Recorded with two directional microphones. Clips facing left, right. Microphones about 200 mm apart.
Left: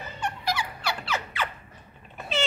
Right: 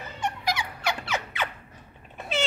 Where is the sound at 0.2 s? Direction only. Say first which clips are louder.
Right 1 dB; 20° right (ahead or behind).